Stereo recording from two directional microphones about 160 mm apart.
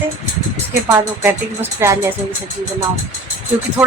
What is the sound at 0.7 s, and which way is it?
Speech, 15° right (ahead or behind).